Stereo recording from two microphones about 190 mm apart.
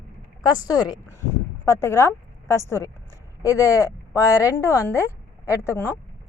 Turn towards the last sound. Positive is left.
turn(degrees=15)  # may be behind; listen again after turning